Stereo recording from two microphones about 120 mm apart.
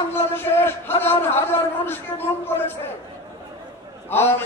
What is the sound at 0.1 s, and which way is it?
A man's voice, 20° left (ahead or behind).